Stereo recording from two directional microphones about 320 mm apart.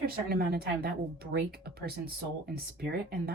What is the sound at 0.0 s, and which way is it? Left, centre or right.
Speech, right.